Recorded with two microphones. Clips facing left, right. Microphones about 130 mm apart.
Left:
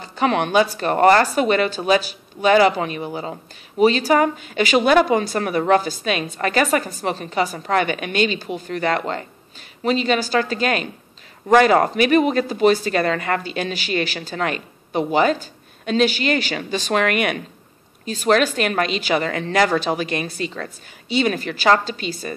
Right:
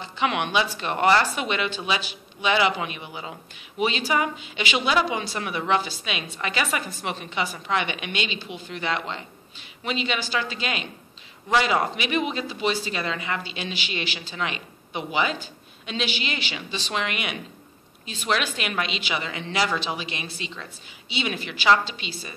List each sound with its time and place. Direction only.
0.0 s speech: 40° left (ahead or behind)